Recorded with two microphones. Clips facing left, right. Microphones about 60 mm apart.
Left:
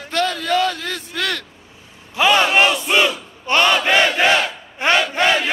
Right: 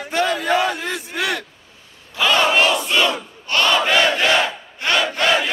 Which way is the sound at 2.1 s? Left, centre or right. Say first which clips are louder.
Left 2 dB; centre.